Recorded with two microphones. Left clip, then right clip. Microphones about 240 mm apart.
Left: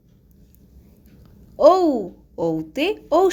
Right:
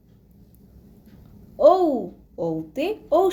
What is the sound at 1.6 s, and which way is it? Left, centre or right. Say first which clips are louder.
A woman's voice: left 2 dB; left.